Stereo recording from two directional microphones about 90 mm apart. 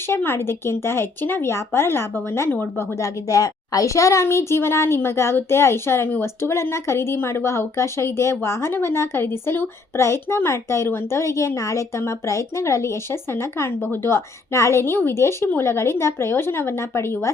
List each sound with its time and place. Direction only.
0.1 s speech: 25° left (ahead or behind)
3.0 s speech: 35° left (ahead or behind)